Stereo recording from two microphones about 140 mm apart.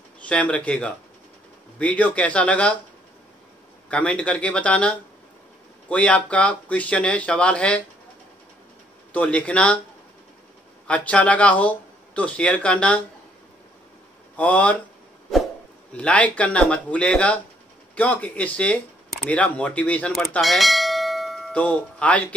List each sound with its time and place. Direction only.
0.3 s speech: 10° left (ahead or behind)
3.9 s speech: 10° left (ahead or behind)
9.1 s speech: 10° left (ahead or behind)
10.9 s speech: 10° left (ahead or behind)
14.3 s speech: 10° left (ahead or behind)
15.9 s speech: 10° left (ahead or behind)
20.2 s bell: centre (ahead or behind)